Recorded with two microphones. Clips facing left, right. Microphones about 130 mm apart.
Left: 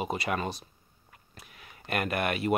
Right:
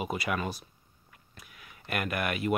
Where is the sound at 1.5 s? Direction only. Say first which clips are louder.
Left 1 dB; 45° left (ahead or behind).